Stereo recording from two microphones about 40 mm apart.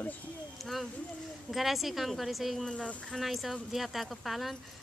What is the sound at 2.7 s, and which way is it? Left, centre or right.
Speech, left.